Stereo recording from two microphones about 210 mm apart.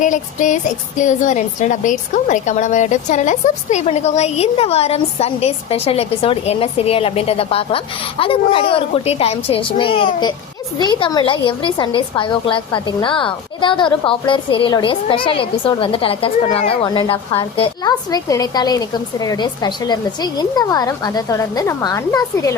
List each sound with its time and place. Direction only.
0.0 s a woman's voice: 35° left (ahead or behind); by 22.5 s 15° left (ahead or behind)